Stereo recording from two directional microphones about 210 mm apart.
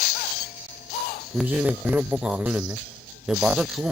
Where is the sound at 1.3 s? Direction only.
10° right (ahead or behind).